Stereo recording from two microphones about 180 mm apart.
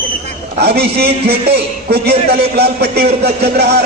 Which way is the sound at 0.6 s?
60° right (ahead or behind).